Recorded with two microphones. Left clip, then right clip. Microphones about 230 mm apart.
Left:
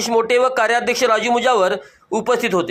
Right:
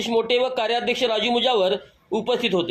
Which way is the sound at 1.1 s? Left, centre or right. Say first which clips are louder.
Left 6 dB; left.